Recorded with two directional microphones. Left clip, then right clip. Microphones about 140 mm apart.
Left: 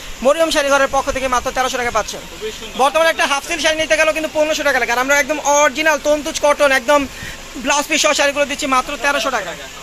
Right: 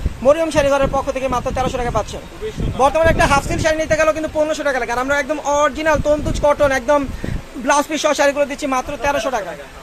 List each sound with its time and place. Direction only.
0.2 s speech: centre (ahead or behind); by 9.4 s 20° right (ahead or behind)